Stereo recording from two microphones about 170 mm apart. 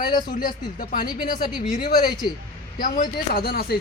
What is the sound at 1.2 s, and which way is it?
Speech, 55° left (ahead or behind).